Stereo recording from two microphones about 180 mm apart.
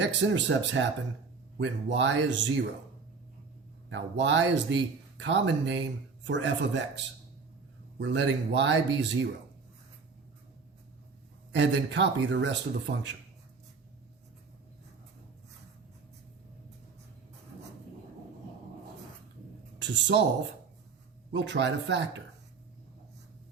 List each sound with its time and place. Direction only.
0.0 s speech: 90° right
3.8 s speech: 90° right
11.5 s speech: 85° right
19.8 s speech: 80° right
21.3 s speech: 80° right